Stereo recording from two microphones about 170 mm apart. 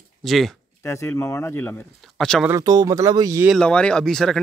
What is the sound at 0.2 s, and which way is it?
Speech, centre (ahead or behind).